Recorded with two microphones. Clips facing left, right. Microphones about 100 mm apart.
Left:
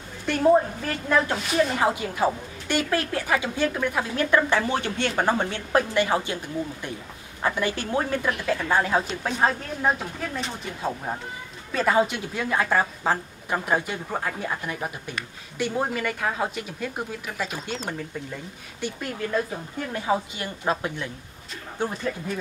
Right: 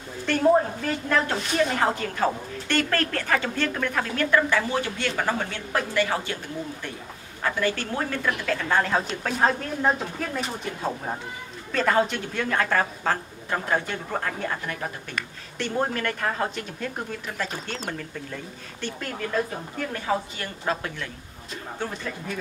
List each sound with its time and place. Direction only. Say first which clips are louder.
1.0 s a woman's voice: left 3 dB; 5° left (ahead or behind)